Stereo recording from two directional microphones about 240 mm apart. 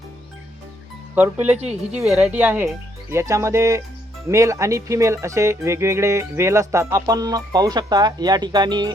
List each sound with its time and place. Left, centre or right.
1.1 s speech: centre
1.5 s a woman's voice: right
2.0 s speech: centre